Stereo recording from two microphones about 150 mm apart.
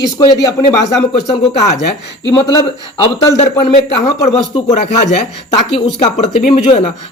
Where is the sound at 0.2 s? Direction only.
25° left (ahead or behind).